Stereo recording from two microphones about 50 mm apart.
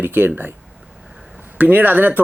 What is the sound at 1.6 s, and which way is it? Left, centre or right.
Speech, right.